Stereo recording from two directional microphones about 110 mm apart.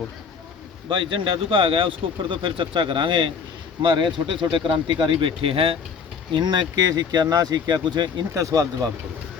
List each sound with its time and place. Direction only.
0.9 s speech: 50° right (ahead or behind)
6.3 s speech: 40° right (ahead or behind)
8.4 s speech: 30° right (ahead or behind)